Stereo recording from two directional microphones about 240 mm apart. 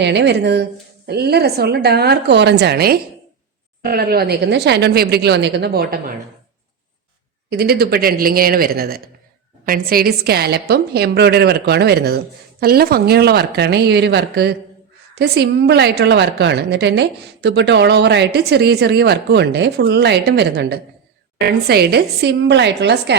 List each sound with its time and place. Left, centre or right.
0.0 s a woman's voice: right
7.5 s a woman's voice: right